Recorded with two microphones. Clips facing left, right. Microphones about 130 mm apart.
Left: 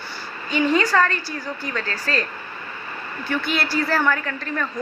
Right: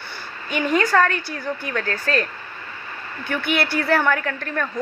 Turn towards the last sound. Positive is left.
turn(degrees=-55)  # may be behind; listen again after turning